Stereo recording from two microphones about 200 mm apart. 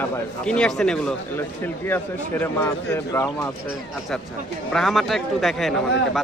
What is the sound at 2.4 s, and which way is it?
Speech, 10° left (ahead or behind).